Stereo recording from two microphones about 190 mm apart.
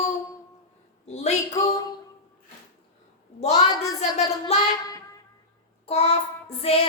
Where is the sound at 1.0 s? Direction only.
35° left (ahead or behind).